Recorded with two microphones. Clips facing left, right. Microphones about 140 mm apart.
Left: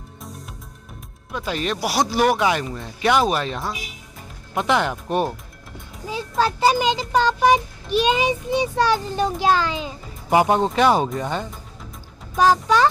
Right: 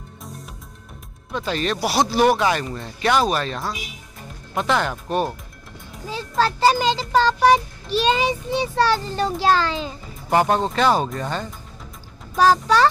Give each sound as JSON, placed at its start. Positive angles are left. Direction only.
{"t": 1.3, "sound": "a child's voice", "side_deg": 10}